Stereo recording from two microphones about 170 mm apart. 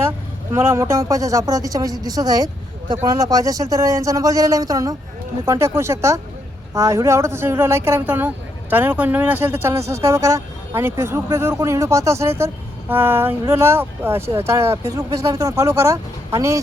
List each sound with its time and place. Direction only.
0.5 s speech: 15° right (ahead or behind)